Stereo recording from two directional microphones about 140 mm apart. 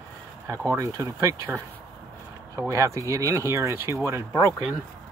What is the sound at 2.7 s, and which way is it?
Speech, 20° right (ahead or behind).